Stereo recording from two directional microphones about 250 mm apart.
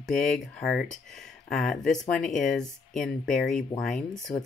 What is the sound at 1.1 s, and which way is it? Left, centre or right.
Speech, centre.